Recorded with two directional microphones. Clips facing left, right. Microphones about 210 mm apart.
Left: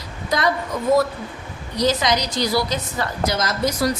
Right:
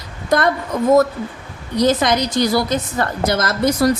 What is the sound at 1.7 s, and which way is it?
A woman's voice, 55° right (ahead or behind).